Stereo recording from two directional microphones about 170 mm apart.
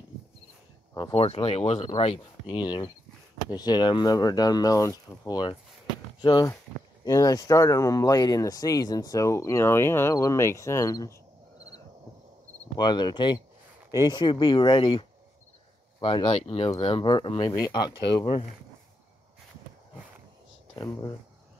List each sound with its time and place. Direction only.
1.1 s speech: 35° left (ahead or behind); by 11.1 s 20° left (ahead or behind)
12.7 s speech: 25° left (ahead or behind)